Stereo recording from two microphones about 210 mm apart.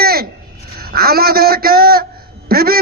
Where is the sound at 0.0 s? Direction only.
45° right (ahead or behind).